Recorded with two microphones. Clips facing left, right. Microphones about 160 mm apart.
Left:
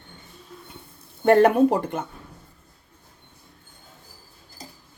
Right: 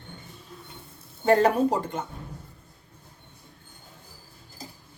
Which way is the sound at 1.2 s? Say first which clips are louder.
Left 4 dB; 60° left (ahead or behind).